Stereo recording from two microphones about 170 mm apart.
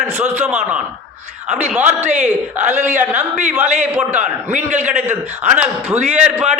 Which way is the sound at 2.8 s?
45° right (ahead or behind).